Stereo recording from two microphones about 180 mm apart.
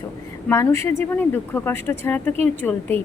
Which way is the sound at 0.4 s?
15° left (ahead or behind).